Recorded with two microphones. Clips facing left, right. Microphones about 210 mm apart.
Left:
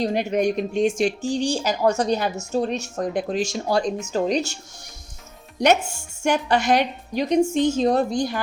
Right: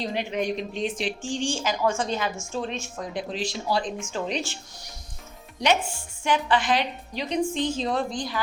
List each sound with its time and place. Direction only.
0.0 s speech: 45° left (ahead or behind)
5.5 s speech: 45° left (ahead or behind)